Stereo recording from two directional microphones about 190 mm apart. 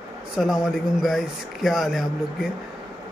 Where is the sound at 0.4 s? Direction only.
5° right (ahead or behind).